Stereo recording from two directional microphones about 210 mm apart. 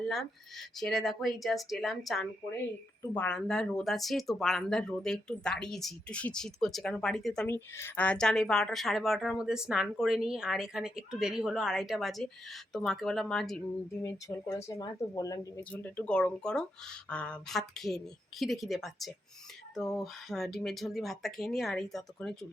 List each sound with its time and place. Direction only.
0.0 s speech: centre (ahead or behind)
14.0 s speech: 15° left (ahead or behind)